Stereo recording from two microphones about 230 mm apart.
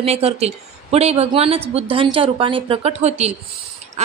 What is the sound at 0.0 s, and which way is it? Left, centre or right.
A woman's voice, right.